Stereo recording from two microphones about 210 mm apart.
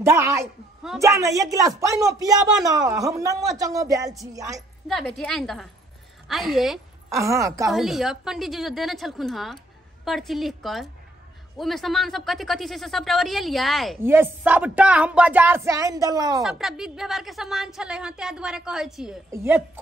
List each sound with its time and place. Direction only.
0.0 s speech: 15° right (ahead or behind)
4.8 s a woman's voice: centre (ahead or behind)
7.2 s speech: 15° right (ahead or behind)
7.7 s a woman's voice: centre (ahead or behind)
14.0 s speech: 10° right (ahead or behind)
16.4 s a woman's voice: centre (ahead or behind)